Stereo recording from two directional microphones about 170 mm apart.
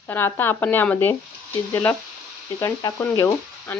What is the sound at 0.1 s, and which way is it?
Speech, 10° left (ahead or behind).